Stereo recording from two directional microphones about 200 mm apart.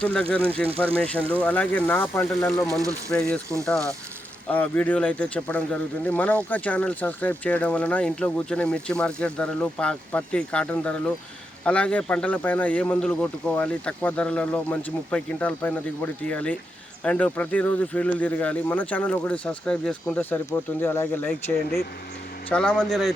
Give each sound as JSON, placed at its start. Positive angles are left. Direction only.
{"t": 0.0, "sound": "speech", "side_deg": 5}
{"t": 4.5, "sound": "speech", "side_deg": 5}